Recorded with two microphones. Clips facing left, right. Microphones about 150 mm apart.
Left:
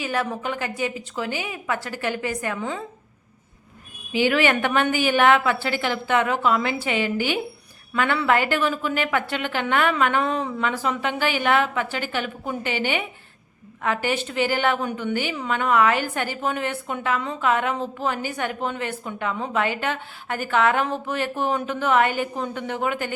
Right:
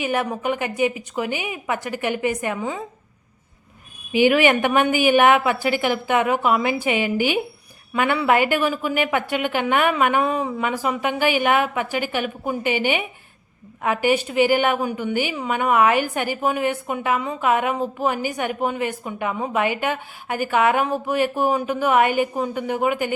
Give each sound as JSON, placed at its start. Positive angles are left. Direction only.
{"t": 0.0, "sound": "a woman's voice", "side_deg": -15}
{"t": 4.1, "sound": "a woman's voice", "side_deg": -15}